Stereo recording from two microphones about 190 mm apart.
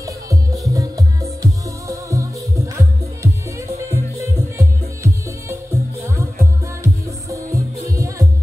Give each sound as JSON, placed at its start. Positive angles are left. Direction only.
{"t": 0.0, "sound": "music", "side_deg": -15}